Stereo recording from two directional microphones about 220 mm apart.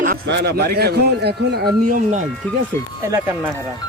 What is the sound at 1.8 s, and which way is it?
Speech, 35° right (ahead or behind).